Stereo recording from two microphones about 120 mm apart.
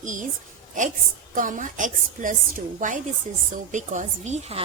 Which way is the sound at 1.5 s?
90° right.